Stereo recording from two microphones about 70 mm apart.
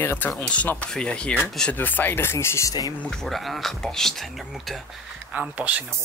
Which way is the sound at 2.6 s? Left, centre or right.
Left.